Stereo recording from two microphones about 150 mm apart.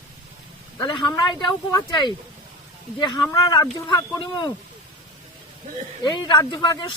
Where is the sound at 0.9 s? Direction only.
30° left (ahead or behind).